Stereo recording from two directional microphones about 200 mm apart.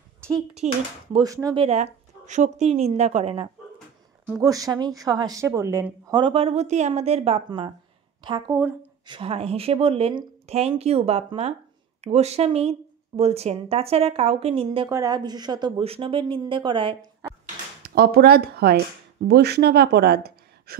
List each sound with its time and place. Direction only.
0.6 s speech: 35° right (ahead or behind)
1.1 s speech: 15° right (ahead or behind); by 3.4 s 35° right (ahead or behind)
4.4 s a woman's voice: 15° right (ahead or behind)
14.9 s a woman's voice: 15° right (ahead or behind)
17.8 s speech: 50° right (ahead or behind)